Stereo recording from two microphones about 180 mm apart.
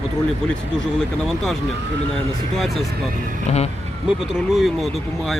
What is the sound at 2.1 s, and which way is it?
Speech, centre (ahead or behind).